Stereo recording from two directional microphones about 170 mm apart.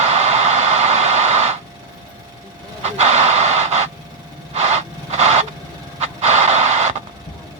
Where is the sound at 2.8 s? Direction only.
40° right (ahead or behind).